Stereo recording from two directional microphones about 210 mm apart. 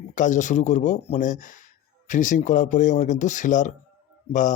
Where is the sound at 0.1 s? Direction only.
35° left (ahead or behind).